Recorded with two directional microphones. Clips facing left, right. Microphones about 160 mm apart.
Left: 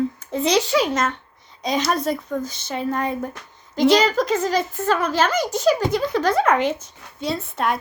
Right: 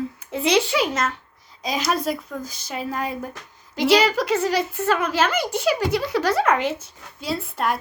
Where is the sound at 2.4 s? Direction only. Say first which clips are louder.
Left 5 dB; 25° left (ahead or behind).